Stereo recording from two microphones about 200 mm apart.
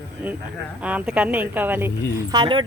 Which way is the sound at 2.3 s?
25° right (ahead or behind).